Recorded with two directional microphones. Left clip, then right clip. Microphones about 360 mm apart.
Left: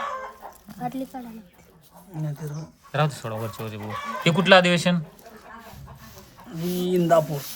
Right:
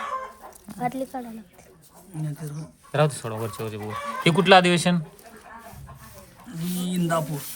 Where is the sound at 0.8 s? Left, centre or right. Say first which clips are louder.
Right 3 dB; centre.